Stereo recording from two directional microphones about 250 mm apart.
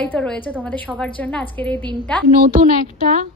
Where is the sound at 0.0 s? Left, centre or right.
Centre.